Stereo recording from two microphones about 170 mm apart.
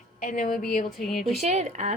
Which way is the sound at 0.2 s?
55° left (ahead or behind).